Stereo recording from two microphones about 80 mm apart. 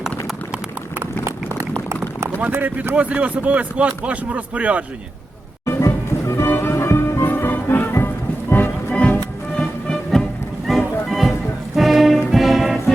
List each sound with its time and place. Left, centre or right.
1.2 s run: right
2.4 s a man's voice: right
5.6 s music: left; by 9.6 s centre
10.7 s music: centre